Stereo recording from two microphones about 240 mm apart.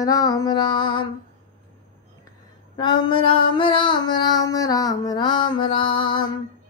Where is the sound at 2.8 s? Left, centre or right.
Centre.